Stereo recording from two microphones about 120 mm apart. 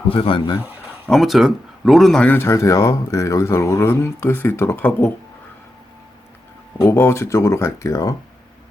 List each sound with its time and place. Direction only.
0.1 s speech: 45° left (ahead or behind)
1.1 s speech: centre (ahead or behind)
2.3 s speech: 20° left (ahead or behind)
6.8 s speech: 20° left (ahead or behind)